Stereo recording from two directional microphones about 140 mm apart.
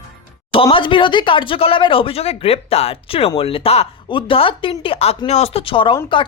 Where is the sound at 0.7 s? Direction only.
35° left (ahead or behind).